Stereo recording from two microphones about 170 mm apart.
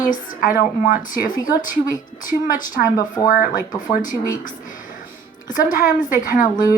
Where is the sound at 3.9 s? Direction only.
50° left (ahead or behind).